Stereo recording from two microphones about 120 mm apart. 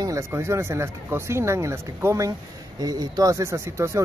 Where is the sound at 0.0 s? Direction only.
25° right (ahead or behind).